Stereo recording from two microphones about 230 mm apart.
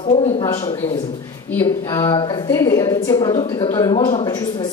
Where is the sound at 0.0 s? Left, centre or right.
Left.